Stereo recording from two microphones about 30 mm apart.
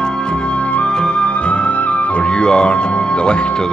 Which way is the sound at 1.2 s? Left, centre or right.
Left.